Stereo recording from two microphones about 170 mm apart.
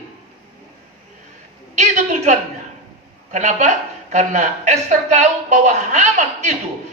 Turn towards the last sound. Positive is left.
turn(degrees=-40)  # may be behind; listen again after turning